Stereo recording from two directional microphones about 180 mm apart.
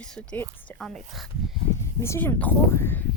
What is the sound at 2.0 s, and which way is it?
Speech, 10° left (ahead or behind).